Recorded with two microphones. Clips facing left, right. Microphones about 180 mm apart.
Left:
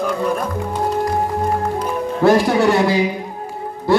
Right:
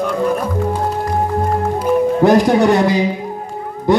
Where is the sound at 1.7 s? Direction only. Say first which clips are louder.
Right 7 dB; 15° right (ahead or behind).